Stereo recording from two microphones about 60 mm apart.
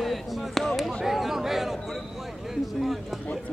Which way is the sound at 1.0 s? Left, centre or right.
Centre.